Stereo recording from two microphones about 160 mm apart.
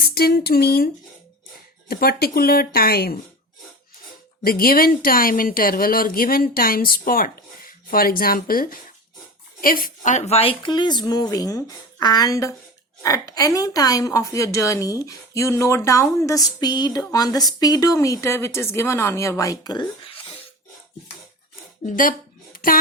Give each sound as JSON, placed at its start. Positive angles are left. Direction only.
{"t": 0.0, "sound": "speech", "side_deg": 70}
{"t": 1.9, "sound": "speech", "side_deg": 75}
{"t": 4.4, "sound": "a woman's voice", "side_deg": 65}
{"t": 21.8, "sound": "speech", "side_deg": 60}
{"t": 22.5, "sound": "a sound", "side_deg": 65}